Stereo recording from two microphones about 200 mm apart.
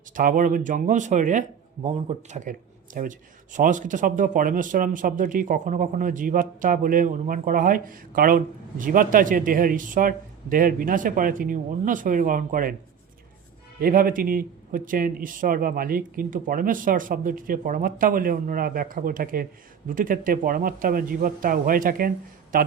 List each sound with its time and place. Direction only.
0.1 s speech: 45° right (ahead or behind)
13.7 s speech: 45° right (ahead or behind)